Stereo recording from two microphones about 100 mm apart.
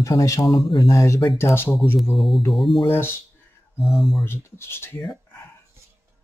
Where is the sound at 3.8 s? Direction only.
Centre (ahead or behind).